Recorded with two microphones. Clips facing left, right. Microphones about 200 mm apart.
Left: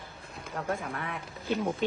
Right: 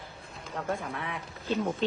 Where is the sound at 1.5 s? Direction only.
10° left (ahead or behind).